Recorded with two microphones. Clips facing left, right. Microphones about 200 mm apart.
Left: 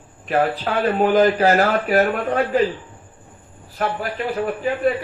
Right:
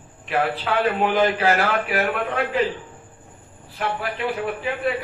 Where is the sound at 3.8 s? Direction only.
40° left (ahead or behind).